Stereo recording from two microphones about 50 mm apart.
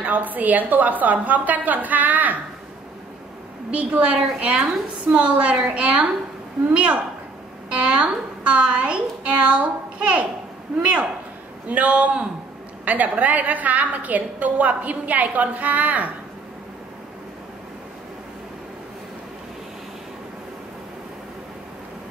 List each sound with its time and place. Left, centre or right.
0.0 s a woman's voice: right
3.7 s a woman's voice: right